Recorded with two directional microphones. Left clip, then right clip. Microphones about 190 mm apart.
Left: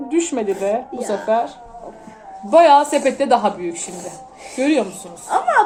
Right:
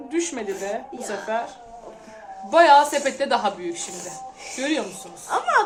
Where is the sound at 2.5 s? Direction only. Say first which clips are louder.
Left 3 dB; 35° left (ahead or behind).